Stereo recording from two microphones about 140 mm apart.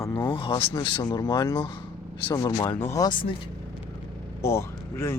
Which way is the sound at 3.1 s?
40° left (ahead or behind).